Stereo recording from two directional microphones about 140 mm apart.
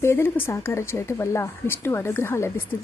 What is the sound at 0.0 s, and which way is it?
A woman's voice, 15° left (ahead or behind).